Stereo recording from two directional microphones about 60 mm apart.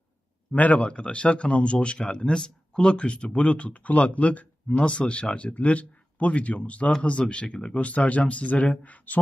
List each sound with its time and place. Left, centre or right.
0.5 s speech: left